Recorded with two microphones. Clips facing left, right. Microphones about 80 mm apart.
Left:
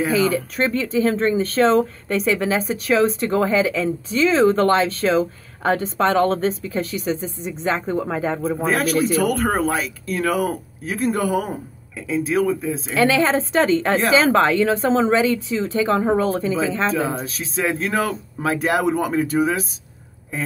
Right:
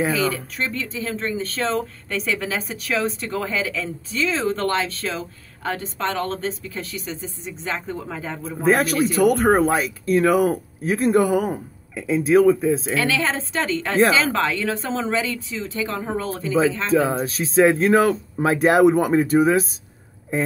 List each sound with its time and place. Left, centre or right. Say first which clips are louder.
0.1 s speech: left 4 dB; left
0.6 s speech: left 7 dB; left
9.3 s speech: right 3 dB; right
10.3 s speech: right 3 dB; centre
10.9 s speech: right 3 dB; right
12.9 s a woman's voice: left 5 dB; left
16.9 s speech: right 4 dB; right
19.2 s speech: right 3 dB; right